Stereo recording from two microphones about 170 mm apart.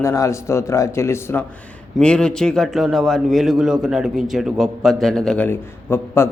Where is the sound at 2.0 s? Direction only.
5° left (ahead or behind).